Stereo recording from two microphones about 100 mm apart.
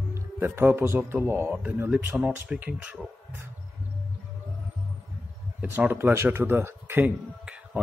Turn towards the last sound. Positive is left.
turn(degrees=-15)  # may be behind; listen again after turning